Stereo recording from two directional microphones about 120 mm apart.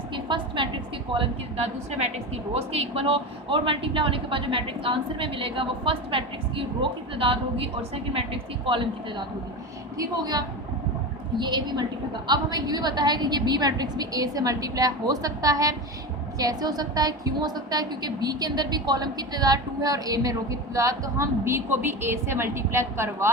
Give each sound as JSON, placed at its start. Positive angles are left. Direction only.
{"t": 0.1, "sound": "a woman's voice", "side_deg": -40}
{"t": 2.0, "sound": "a woman's voice", "side_deg": -65}
{"t": 10.0, "sound": "a woman's voice", "side_deg": -35}